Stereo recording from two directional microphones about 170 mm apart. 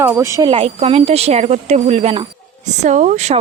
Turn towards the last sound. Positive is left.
turn(degrees=-45)  # may be behind; listen again after turning